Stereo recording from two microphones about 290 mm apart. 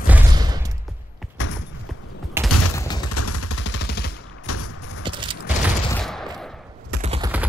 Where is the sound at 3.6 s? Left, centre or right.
Left.